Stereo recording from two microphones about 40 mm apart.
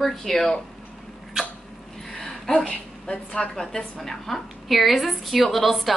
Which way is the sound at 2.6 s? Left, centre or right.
Left.